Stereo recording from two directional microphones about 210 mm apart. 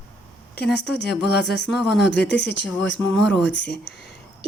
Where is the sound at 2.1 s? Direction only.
55° left (ahead or behind).